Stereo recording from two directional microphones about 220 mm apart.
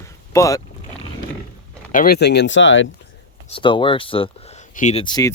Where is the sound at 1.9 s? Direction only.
40° left (ahead or behind); by 2.8 s 60° left (ahead or behind).